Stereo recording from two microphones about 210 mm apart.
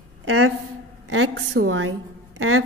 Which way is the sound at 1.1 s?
75° right (ahead or behind).